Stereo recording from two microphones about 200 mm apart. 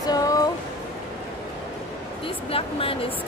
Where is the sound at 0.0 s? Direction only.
20° left (ahead or behind).